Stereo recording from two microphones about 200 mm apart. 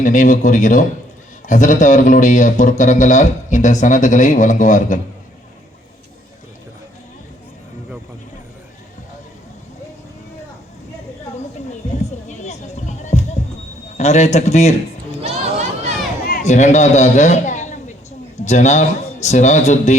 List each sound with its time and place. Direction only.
0.0 s speech: 40° left (ahead or behind)
11.9 s music: 35° left (ahead or behind)
13.9 s speech: 35° left (ahead or behind)
15.3 s a sound: 35° right (ahead or behind)
16.2 s a man's voice: 40° left (ahead or behind)